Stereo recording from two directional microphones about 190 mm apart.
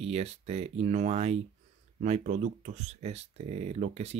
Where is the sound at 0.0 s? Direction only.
35° right (ahead or behind).